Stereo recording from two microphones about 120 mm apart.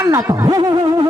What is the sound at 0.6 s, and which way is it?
Music, 40° right (ahead or behind).